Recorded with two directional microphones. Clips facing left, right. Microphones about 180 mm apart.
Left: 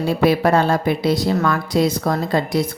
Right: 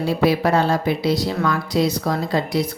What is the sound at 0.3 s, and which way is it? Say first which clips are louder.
A woman's voice: left 3 dB; 55° left (ahead or behind).